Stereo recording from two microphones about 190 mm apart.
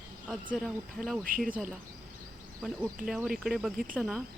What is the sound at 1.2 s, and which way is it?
Speech, 45° right (ahead or behind).